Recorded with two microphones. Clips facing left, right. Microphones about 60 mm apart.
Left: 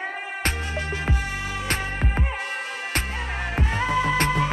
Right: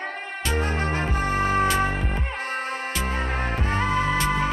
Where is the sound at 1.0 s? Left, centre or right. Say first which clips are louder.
Right 5 dB; right.